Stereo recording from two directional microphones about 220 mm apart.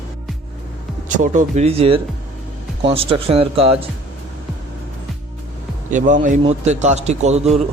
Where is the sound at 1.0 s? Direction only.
35° right (ahead or behind).